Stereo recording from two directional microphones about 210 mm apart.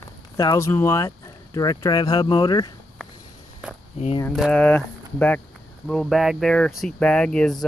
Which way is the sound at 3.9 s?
30° left (ahead or behind).